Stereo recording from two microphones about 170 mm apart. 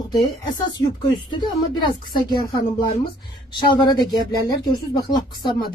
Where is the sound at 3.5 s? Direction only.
25° left (ahead or behind).